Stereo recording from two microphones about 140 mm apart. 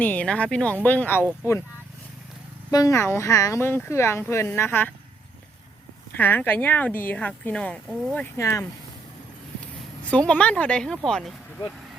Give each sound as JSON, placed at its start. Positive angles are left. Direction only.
{"t": 0.0, "sound": "speech", "side_deg": 10}
{"t": 2.6, "sound": "speech", "side_deg": 25}
{"t": 6.1, "sound": "speech", "side_deg": 15}
{"t": 8.4, "sound": "speech", "side_deg": 20}
{"t": 10.1, "sound": "a woman's voice", "side_deg": 10}